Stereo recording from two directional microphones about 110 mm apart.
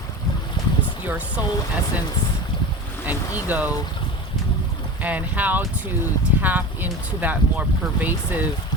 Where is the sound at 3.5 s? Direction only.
15° right (ahead or behind).